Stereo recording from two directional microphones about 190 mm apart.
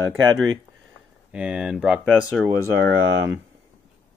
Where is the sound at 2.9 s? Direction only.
75° right (ahead or behind).